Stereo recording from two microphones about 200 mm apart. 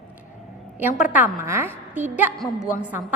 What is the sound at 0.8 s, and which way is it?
A woman's voice, 10° right (ahead or behind).